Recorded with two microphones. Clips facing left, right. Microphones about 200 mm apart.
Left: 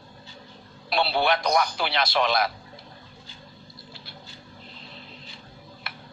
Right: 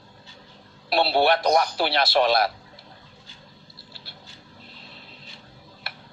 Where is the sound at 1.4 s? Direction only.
35° right (ahead or behind).